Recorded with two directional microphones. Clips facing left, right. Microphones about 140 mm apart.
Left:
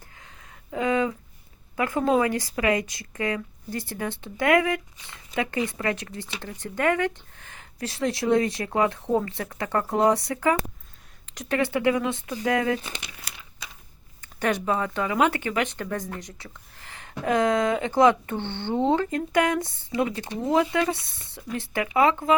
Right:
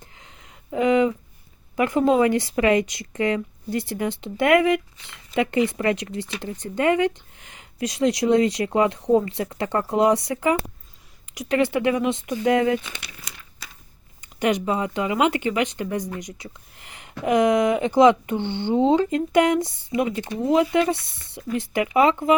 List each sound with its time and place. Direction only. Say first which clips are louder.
0.2 s a sound: right 1 dB; 20° right (ahead or behind)
1.7 s speech: right 4 dB; 20° right (ahead or behind)
12.7 s speech: right 4 dB; 35° left (ahead or behind)
14.2 s speech: right 4 dB; 15° right (ahead or behind)